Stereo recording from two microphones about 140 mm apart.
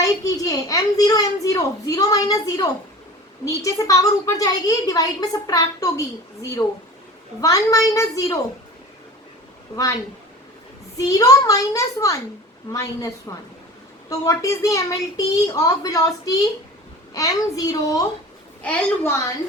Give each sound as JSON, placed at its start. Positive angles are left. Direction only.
{"t": 0.0, "sound": "a child's voice", "side_deg": 25}
{"t": 7.4, "sound": "a child's voice", "side_deg": 25}
{"t": 9.7, "sound": "a child's voice", "side_deg": 25}
{"t": 10.9, "sound": "a child's voice", "side_deg": 25}
{"t": 18.6, "sound": "a woman's voice", "side_deg": 10}